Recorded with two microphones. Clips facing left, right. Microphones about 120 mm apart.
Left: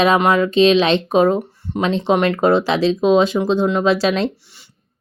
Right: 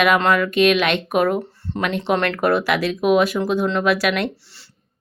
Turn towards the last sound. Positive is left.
turn(degrees=25)  # may be behind; listen again after turning